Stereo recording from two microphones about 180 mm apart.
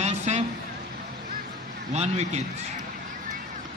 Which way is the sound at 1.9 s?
35° right (ahead or behind).